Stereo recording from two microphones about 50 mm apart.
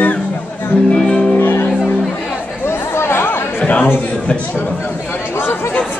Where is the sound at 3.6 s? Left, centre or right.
Left.